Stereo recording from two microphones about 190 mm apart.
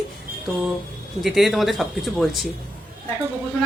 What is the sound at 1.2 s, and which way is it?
Speech, centre (ahead or behind).